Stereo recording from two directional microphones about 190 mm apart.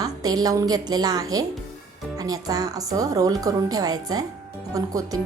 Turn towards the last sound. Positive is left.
turn(degrees=-20)  # may be behind; listen again after turning